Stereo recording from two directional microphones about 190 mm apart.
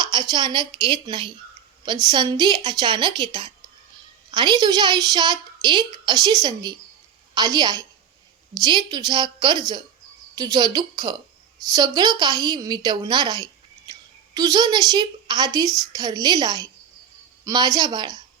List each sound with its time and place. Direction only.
0.0 s a child's voice: 20° right (ahead or behind)